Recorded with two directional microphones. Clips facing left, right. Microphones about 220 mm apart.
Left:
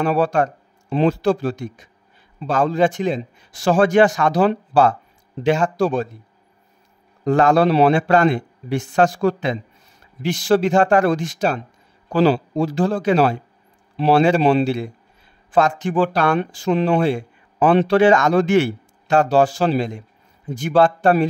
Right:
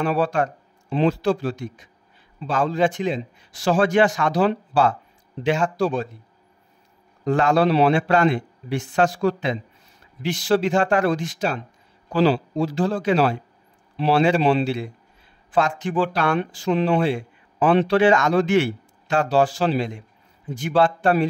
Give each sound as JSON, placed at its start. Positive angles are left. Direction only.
{"t": 0.0, "sound": "speech", "side_deg": 45}
{"t": 7.2, "sound": "speech", "side_deg": 45}